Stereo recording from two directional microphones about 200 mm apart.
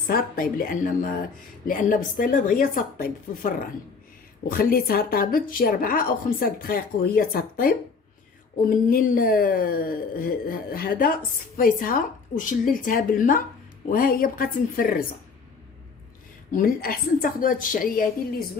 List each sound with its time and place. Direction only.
0.1 s speech: 45° left (ahead or behind)
8.9 s speech: 45° left (ahead or behind)
16.5 s speech: 45° left (ahead or behind)